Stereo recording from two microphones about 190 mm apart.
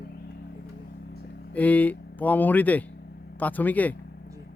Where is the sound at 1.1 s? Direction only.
55° left (ahead or behind).